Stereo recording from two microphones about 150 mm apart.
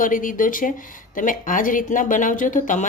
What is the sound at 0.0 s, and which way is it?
A woman's voice, 65° left (ahead or behind).